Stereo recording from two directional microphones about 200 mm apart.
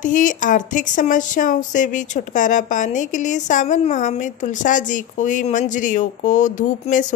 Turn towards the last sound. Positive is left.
turn(degrees=40)  # may be behind; listen again after turning